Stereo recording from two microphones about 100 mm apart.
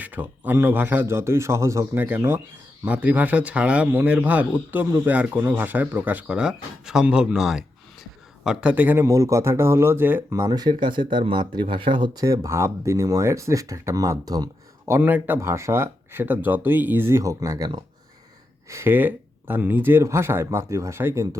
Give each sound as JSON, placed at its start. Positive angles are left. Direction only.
{"t": 0.0, "sound": "speech", "side_deg": -15}
{"t": 9.0, "sound": "speech", "side_deg": -30}
{"t": 10.5, "sound": "speech", "side_deg": -45}
{"t": 12.2, "sound": "speech", "side_deg": -35}
{"t": 14.8, "sound": "speech", "side_deg": -20}
{"t": 18.7, "sound": "speech", "side_deg": -25}